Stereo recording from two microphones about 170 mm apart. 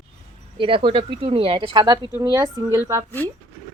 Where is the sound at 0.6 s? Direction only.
30° right (ahead or behind); by 3.1 s 15° right (ahead or behind).